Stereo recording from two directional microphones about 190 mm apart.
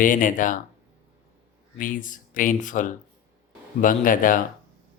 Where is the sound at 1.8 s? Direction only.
45° left (ahead or behind).